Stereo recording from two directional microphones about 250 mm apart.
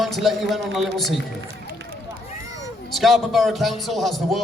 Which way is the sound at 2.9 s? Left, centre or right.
Centre.